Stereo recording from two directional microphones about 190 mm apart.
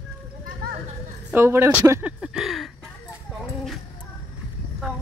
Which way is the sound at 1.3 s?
10° right (ahead or behind).